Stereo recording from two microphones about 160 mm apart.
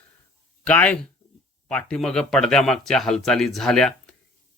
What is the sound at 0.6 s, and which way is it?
Speech, 10° left (ahead or behind).